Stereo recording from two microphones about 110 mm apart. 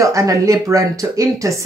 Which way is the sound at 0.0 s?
30° right (ahead or behind).